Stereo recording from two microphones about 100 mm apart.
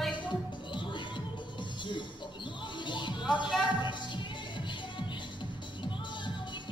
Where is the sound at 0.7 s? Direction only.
50° left (ahead or behind).